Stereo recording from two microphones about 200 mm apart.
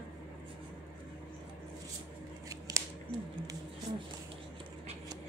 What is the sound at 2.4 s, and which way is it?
Scissors, 15° right (ahead or behind).